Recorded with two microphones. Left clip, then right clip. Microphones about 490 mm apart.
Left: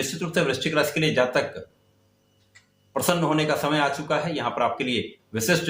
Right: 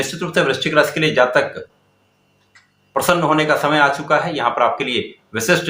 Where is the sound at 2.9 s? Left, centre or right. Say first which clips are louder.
Right 8 dB; left.